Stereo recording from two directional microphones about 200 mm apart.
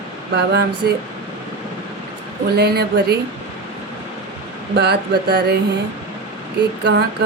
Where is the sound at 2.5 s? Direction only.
55° right (ahead or behind).